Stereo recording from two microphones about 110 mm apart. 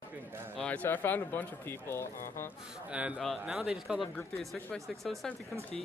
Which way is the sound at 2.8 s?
10° right (ahead or behind).